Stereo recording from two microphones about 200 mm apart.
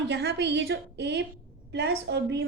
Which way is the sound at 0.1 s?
55° right (ahead or behind).